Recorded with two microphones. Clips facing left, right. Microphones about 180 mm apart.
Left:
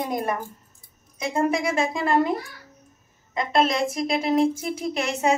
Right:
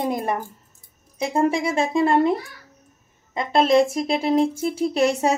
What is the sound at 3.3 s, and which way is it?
A woman's voice, 30° right (ahead or behind).